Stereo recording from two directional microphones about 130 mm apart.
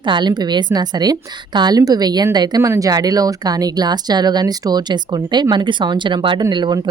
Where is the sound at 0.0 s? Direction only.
35° right (ahead or behind).